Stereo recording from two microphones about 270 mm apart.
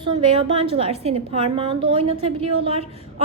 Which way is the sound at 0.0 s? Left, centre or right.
Centre.